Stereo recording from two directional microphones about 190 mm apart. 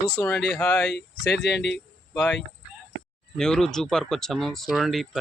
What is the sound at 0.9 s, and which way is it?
Speech, 60° left (ahead or behind).